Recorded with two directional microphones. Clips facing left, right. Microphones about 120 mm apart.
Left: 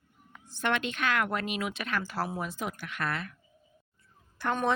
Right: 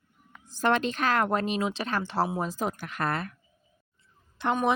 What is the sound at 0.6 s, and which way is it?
Speech, 35° right (ahead or behind).